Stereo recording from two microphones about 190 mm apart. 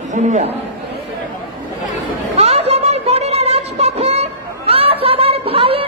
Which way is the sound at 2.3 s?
35° right (ahead or behind).